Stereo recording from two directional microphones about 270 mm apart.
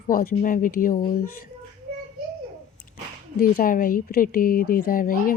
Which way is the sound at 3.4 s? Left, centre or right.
Left.